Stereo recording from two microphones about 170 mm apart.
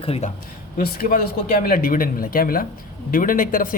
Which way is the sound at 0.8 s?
55° left (ahead or behind).